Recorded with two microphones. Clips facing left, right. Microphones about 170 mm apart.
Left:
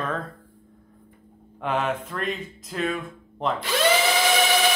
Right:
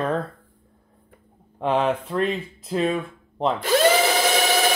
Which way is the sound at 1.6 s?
30° right (ahead or behind).